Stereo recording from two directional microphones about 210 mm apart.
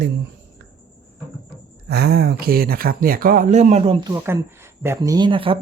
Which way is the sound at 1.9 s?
50° right (ahead or behind).